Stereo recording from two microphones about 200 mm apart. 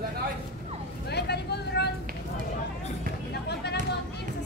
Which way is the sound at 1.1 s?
55° left (ahead or behind).